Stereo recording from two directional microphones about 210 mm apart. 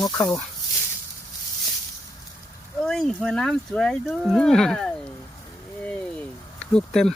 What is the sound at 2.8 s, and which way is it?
Speech, 5° left (ahead or behind).